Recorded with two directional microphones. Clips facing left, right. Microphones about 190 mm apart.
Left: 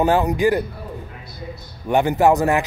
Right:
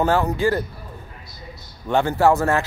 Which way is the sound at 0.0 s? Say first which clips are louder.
Left 2 dB; 15° left (ahead or behind).